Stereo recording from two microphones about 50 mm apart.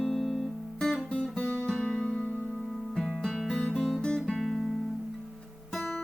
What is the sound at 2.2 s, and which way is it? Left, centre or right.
Music, left.